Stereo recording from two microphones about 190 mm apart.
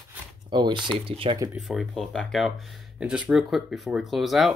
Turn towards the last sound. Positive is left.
turn(degrees=0)  # may be behind; listen again after turning